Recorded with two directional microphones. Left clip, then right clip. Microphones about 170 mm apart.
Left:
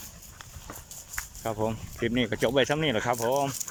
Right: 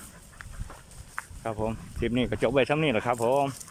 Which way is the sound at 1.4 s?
Centre (ahead or behind).